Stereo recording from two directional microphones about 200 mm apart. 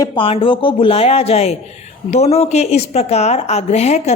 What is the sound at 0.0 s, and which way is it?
Speech, 25° left (ahead or behind).